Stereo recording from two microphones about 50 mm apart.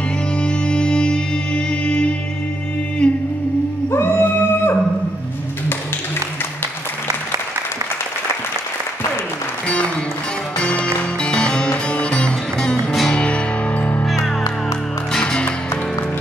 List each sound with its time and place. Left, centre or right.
0.4 s music: centre
3.9 s music: left
10.6 s music: left
14.0 s music: centre
15.1 s music: centre